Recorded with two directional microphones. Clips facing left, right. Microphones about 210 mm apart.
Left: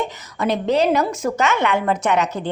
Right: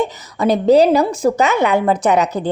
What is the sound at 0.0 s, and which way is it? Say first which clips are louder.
A woman's voice: right 5 dB; 35° right (ahead or behind).